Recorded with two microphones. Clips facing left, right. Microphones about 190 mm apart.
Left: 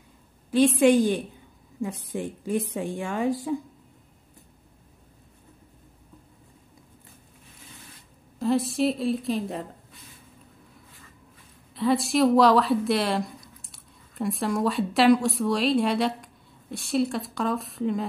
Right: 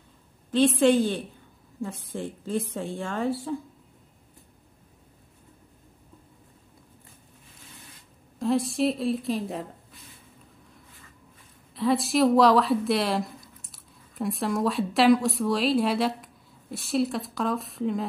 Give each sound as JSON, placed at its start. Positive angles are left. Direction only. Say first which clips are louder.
{"t": 0.7, "sound": "a woman's voice", "louder": "left 2 dB", "side_deg": 15}
{"t": 8.4, "sound": "speech", "louder": "left 1 dB", "side_deg": 0}
{"t": 11.7, "sound": "speech", "louder": "left 1 dB", "side_deg": 0}